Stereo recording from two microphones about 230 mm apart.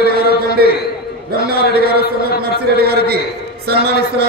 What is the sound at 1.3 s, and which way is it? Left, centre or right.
A man's voice, right.